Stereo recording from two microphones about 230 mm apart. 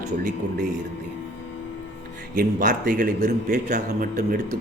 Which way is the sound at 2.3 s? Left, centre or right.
Right.